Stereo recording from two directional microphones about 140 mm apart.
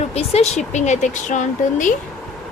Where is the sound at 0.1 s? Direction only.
50° left (ahead or behind); by 2.0 s 65° left (ahead or behind).